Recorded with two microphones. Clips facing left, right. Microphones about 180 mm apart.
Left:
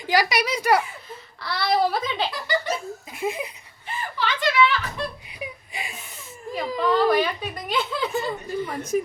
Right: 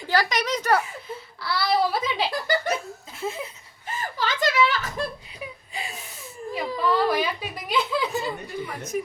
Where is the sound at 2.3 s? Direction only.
50° right (ahead or behind).